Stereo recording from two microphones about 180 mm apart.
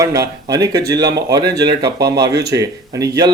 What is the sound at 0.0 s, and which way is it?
A man's voice, 20° right (ahead or behind).